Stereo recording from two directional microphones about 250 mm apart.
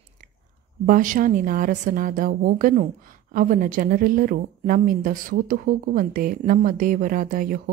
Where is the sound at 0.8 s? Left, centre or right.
Right.